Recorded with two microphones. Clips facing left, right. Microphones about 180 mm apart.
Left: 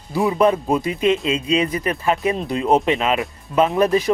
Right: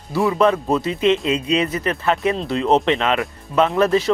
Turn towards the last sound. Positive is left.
turn(degrees=15)  # may be behind; listen again after turning